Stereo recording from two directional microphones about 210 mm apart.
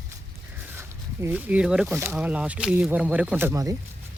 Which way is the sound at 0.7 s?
10° right (ahead or behind).